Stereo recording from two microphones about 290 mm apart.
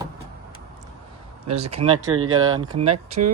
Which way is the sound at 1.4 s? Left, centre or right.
Right.